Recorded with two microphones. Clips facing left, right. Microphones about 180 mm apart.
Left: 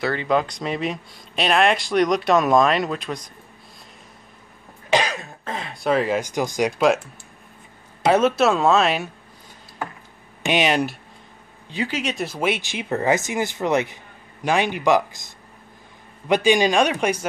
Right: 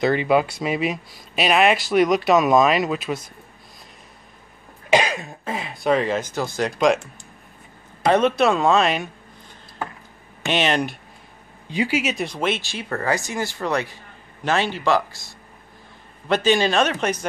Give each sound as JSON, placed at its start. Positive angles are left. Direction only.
{"t": 0.0, "sound": "speech", "side_deg": -15}
{"t": 4.8, "sound": "speech", "side_deg": -10}
{"t": 8.0, "sound": "speech", "side_deg": 5}
{"t": 10.4, "sound": "speech", "side_deg": 10}
{"t": 11.7, "sound": "speech", "side_deg": -10}